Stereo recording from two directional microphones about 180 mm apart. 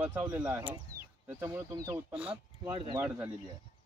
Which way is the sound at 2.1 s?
5° right (ahead or behind).